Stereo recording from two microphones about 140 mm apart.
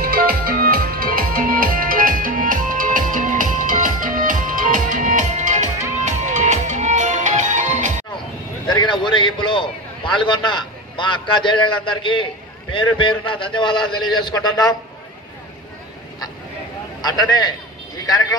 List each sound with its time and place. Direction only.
0.0 s music: 90° right; by 7.9 s 60° right (ahead or behind)
8.6 s a sound: 35° left (ahead or behind)
12.7 s a man's voice: 35° left (ahead or behind)
17.0 s a man's voice: 30° left (ahead or behind)